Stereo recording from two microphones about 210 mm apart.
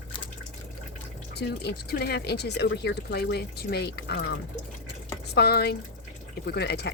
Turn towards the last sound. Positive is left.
turn(degrees=50)  # may be behind; listen again after turning